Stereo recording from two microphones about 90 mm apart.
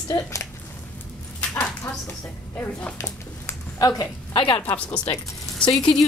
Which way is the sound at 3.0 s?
40° left (ahead or behind).